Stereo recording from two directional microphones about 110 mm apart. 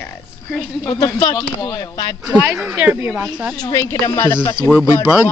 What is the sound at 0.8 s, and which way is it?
Speech, 35° left (ahead or behind).